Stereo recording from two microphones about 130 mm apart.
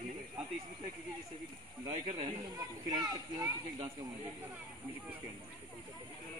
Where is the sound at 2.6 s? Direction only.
30° right (ahead or behind).